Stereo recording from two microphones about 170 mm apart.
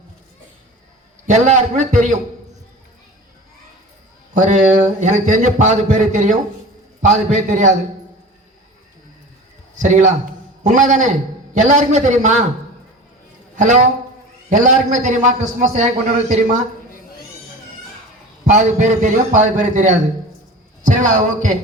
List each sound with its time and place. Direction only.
1.3 s a man's voice: 45° right (ahead or behind)
4.4 s a man's voice: 45° right (ahead or behind)
9.7 s a man's voice: 45° right (ahead or behind)
13.6 s a man's voice: 45° right (ahead or behind)
18.4 s a man's voice: 45° right (ahead or behind)